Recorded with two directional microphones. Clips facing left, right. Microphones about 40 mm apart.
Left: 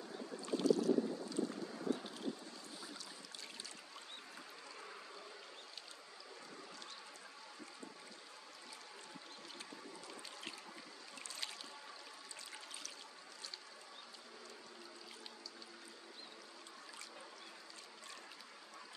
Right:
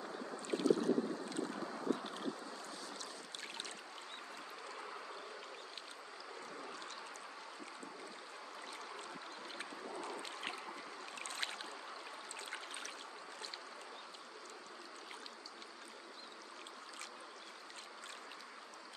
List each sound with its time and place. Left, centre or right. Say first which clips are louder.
0.0 s boat: right 2 dB; right
4.7 s a sound: right 4 dB; centre
9.6 s boat: right 9 dB; right